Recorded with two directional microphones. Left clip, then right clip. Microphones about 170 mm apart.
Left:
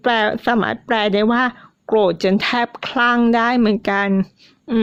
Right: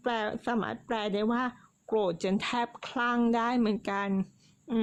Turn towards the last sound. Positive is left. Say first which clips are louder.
# left 12 dB
turn(degrees=35)  # may be behind; listen again after turning